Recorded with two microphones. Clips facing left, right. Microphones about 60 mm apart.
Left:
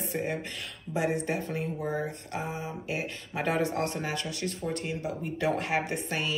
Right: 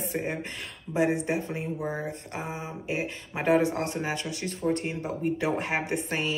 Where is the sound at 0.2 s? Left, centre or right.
Right.